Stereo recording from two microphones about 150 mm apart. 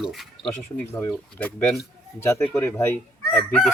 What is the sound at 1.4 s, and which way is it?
Speech, 10° left (ahead or behind).